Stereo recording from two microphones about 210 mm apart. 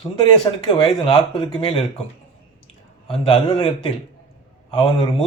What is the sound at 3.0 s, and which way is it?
Speech, 25° left (ahead or behind).